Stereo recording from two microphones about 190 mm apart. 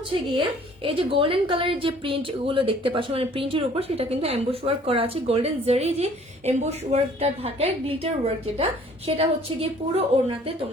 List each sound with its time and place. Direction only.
0.3 s a woman's voice: 25° right (ahead or behind)